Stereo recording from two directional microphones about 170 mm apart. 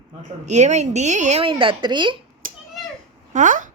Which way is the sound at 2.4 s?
55° right (ahead or behind).